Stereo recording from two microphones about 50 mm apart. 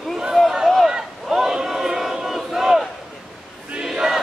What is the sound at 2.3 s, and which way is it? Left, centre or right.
Battle cry, centre.